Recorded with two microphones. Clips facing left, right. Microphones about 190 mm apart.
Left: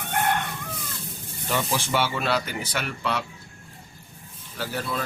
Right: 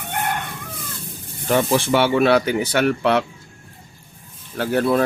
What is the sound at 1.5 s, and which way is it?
Speech, 55° right (ahead or behind).